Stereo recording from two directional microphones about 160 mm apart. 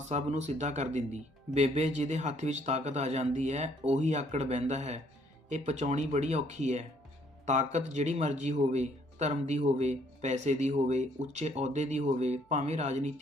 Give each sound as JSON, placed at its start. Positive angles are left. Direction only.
{"t": 0.1, "sound": "a man's voice", "side_deg": -45}